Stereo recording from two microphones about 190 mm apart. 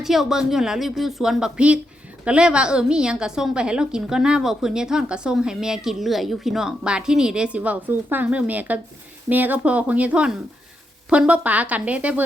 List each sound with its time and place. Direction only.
0.0 s a woman's voice: centre (ahead or behind)